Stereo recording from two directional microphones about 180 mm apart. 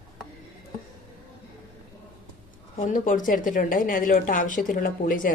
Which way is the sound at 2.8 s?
45° left (ahead or behind).